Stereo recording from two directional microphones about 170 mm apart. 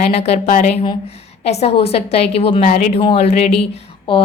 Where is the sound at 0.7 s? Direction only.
30° left (ahead or behind).